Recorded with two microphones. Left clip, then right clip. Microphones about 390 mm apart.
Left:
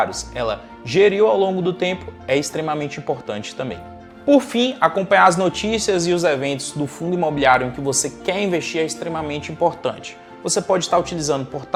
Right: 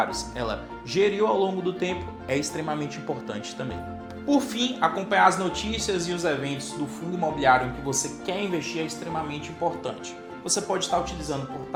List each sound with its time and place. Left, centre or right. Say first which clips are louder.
0.0 s speech: left 6 dB; left
4.3 s a woman's voice: left 9 dB; left